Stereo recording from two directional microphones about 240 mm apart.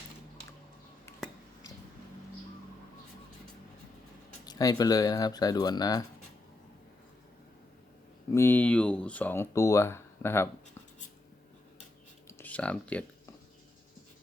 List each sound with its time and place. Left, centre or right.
4.4 s speech: centre
8.3 s speech: centre
12.3 s speech: centre